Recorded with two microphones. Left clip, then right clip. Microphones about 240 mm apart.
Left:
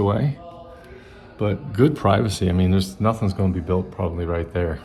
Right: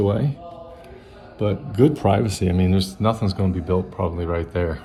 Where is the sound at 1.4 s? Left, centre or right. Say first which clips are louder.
Right 1 dB; centre.